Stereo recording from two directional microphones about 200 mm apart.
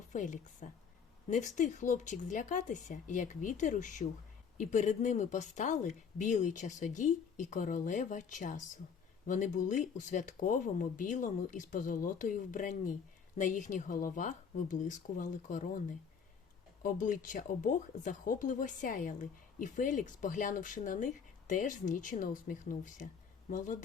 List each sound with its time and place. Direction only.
0.1 s speech: 40° left (ahead or behind)